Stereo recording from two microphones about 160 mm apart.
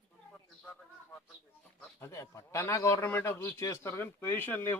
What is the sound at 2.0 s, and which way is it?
A man's voice, 15° left (ahead or behind).